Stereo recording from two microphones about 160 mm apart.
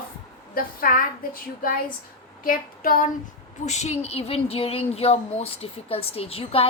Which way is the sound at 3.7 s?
45° left (ahead or behind).